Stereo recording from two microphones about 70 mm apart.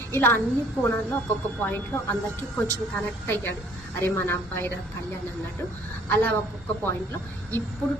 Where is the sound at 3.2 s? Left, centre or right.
Left.